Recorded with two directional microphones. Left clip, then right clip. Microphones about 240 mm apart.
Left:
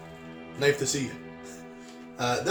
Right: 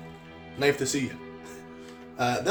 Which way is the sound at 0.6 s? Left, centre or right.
Right.